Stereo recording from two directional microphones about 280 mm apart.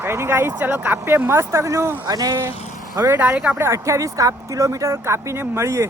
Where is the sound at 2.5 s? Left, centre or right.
Left.